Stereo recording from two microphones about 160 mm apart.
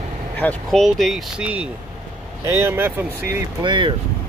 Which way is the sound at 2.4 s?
15° right (ahead or behind).